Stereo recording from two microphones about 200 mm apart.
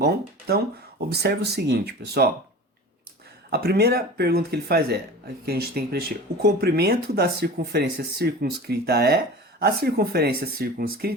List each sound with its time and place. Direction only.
0.0 s speech: 55° right (ahead or behind)
3.5 s speech: 50° right (ahead or behind)